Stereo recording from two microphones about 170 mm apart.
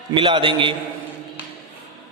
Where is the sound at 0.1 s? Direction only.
30° right (ahead or behind).